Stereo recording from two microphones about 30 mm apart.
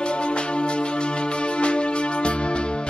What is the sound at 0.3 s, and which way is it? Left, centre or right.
Music, left.